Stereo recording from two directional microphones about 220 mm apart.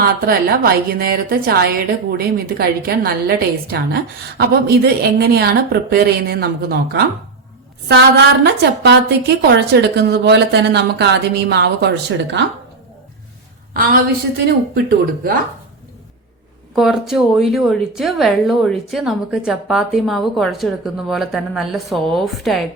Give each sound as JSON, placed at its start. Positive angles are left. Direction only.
{"t": 0.0, "sound": "a woman's voice", "side_deg": -40}
{"t": 14.4, "sound": "speech", "side_deg": -40}
{"t": 16.7, "sound": "a woman's voice", "side_deg": 0}